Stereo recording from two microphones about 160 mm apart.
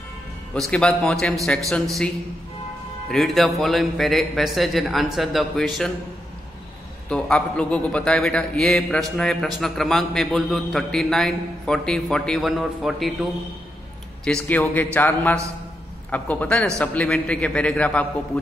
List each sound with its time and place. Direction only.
0.6 s a man's voice: 5° left (ahead or behind)
3.1 s a man's voice: centre (ahead or behind)
7.1 s a man's voice: 5° left (ahead or behind)
14.2 s a man's voice: 5° left (ahead or behind)